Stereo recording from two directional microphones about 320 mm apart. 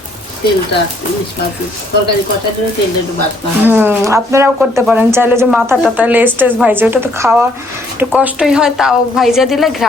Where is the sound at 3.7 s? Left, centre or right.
Centre.